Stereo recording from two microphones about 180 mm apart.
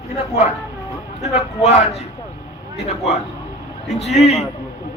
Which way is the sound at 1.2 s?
40° left (ahead or behind).